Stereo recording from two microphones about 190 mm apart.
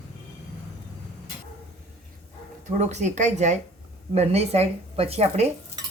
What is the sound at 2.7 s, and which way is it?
Speech, 35° right (ahead or behind).